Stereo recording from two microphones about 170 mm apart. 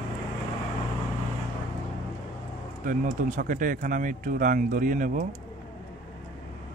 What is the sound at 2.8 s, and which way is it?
Speech, 50° right (ahead or behind).